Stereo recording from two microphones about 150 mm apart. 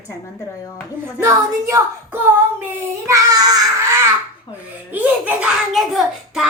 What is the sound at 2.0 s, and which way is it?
Child singing, 10° right (ahead or behind).